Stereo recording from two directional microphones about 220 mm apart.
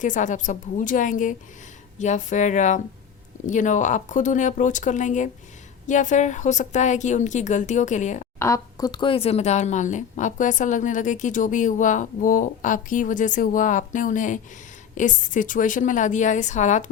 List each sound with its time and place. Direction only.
0.0 s speech: 35° left (ahead or behind)
8.4 s speech: 15° left (ahead or behind); by 16.8 s 35° left (ahead or behind)